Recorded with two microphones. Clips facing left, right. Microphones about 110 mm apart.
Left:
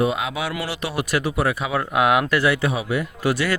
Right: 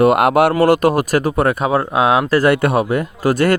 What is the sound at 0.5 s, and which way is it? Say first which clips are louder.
Speech: right 14 dB; 50° right (ahead or behind).